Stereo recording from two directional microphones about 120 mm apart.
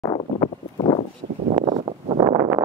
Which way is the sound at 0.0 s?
35° left (ahead or behind).